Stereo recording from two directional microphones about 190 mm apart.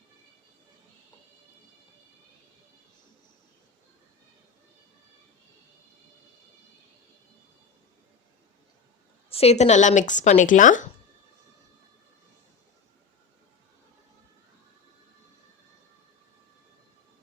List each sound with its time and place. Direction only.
9.3 s speech: 35° left (ahead or behind)